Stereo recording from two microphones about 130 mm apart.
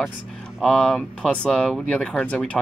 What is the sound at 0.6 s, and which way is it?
Speech, 5° left (ahead or behind).